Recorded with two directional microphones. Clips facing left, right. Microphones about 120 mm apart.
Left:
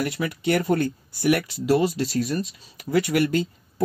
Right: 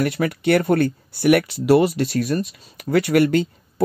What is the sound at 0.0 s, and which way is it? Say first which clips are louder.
Speech: right 5 dB; 60° right (ahead or behind).